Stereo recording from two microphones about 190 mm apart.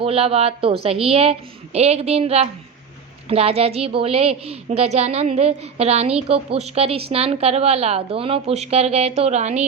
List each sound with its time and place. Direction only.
0.0 s a woman's voice: 30° right (ahead or behind)